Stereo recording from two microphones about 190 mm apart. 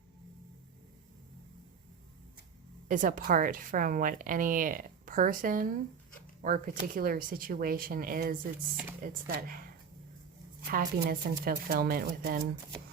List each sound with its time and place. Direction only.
2.9 s a woman's voice: 45° right (ahead or behind)
10.6 s a woman's voice: 50° right (ahead or behind)